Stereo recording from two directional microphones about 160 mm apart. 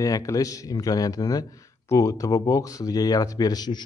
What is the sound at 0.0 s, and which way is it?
Speech, 20° left (ahead or behind).